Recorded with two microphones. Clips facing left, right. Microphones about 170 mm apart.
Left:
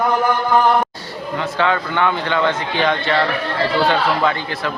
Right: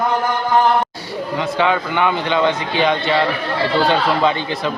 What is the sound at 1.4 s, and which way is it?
A man's voice, 15° right (ahead or behind).